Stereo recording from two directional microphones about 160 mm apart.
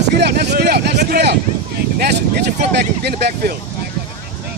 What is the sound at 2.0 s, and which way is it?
Speech, 80° right.